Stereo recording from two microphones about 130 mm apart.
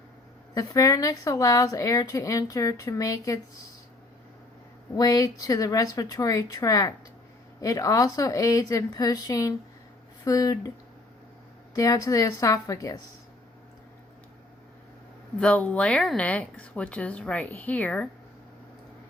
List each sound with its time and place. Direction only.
0.5 s a woman's voice: 25° left (ahead or behind)
4.9 s a woman's voice: 30° left (ahead or behind)
11.7 s a woman's voice: 25° left (ahead or behind)
15.4 s speech: 10° left (ahead or behind)